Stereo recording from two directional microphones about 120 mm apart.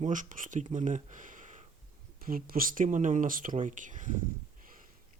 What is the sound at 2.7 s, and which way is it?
Speech, 90° right.